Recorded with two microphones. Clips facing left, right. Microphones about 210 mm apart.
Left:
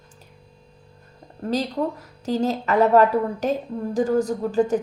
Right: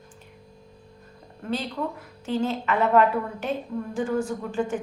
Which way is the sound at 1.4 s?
40° left (ahead or behind).